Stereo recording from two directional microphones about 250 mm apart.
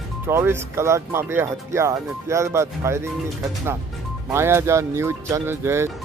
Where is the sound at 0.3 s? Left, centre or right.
Centre.